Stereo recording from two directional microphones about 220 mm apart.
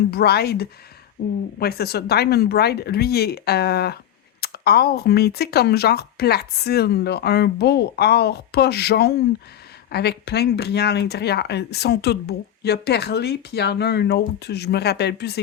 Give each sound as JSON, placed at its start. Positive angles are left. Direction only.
{"t": 0.1, "sound": "speech", "side_deg": 45}